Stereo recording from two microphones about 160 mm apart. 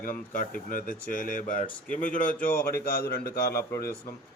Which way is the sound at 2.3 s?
15° left (ahead or behind).